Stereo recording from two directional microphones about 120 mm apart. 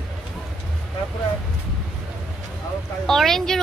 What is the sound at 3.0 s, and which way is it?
Speech, 5° left (ahead or behind).